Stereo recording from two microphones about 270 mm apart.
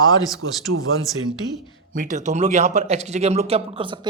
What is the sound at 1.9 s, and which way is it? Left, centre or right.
A man's voice, right.